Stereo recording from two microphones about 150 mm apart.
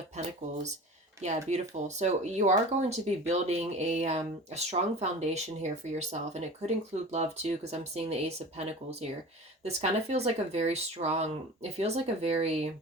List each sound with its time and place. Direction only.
0.2 s speech: 50° right (ahead or behind)
1.5 s speech: 50° right (ahead or behind)